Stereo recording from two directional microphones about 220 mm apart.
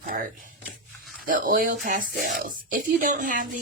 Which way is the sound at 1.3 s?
40° right (ahead or behind).